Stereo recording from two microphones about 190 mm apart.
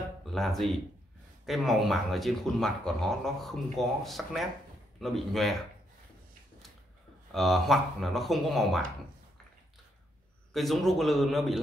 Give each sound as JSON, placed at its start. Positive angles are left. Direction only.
{"t": 0.2, "sound": "speech", "side_deg": 0}
{"t": 7.3, "sound": "speech", "side_deg": 0}
{"t": 10.5, "sound": "speech", "side_deg": 0}